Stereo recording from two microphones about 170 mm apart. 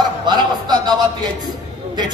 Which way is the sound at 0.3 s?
25° right (ahead or behind).